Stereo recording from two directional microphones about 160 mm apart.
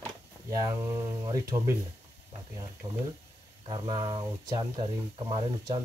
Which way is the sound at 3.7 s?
30° right (ahead or behind).